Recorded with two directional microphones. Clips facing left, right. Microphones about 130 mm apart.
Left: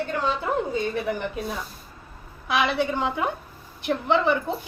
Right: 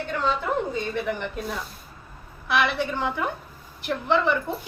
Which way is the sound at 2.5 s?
15° left (ahead or behind).